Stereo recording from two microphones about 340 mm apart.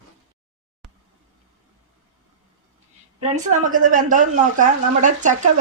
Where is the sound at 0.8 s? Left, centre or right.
Centre.